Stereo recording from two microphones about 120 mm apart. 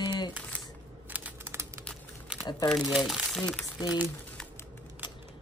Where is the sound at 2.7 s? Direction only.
Centre (ahead or behind).